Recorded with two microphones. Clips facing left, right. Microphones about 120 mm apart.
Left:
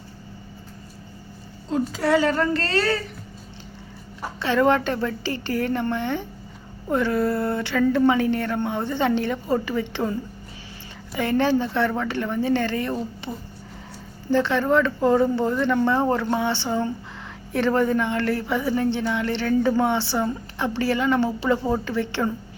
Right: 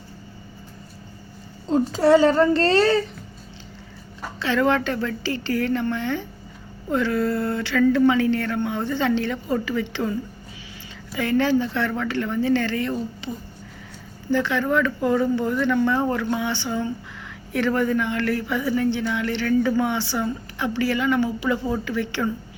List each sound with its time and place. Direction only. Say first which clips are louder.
1.9 s a woman's voice: right 5 dB; 30° right (ahead or behind)
4.2 s speech: left 1 dB; 20° left (ahead or behind)
11.1 s speech: even; 20° left (ahead or behind)
14.3 s speech: left 2 dB; 25° left (ahead or behind)